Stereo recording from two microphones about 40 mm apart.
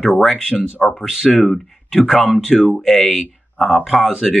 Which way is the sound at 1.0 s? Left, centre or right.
Centre.